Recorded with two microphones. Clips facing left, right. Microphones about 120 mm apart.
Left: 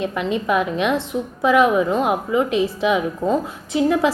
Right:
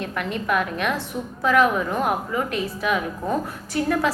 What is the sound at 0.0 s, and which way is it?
A woman's voice, 15° left (ahead or behind).